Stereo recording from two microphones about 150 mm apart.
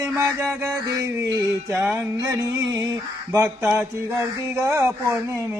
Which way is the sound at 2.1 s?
20° right (ahead or behind).